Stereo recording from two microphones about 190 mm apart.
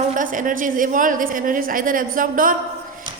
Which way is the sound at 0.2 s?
45° right (ahead or behind).